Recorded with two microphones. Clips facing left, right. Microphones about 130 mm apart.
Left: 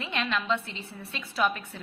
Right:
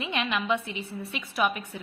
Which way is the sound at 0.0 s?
15° right (ahead or behind).